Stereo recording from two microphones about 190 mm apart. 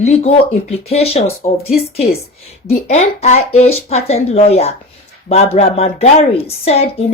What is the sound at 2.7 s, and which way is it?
Speech, 35° left (ahead or behind).